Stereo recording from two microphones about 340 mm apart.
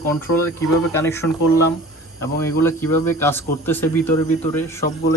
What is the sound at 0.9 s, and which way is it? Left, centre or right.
A man's voice, centre.